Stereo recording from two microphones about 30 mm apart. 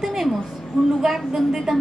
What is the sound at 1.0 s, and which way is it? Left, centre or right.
Speech, centre.